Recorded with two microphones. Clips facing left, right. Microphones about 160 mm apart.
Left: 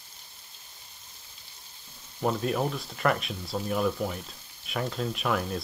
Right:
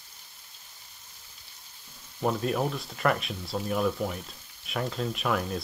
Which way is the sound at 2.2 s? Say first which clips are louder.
Even; centre (ahead or behind).